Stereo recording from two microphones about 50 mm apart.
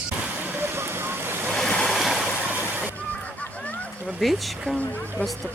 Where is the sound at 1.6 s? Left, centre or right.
Centre.